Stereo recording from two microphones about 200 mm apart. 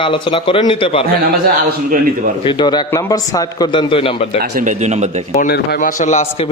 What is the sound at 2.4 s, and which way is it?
A man's voice, 20° left (ahead or behind).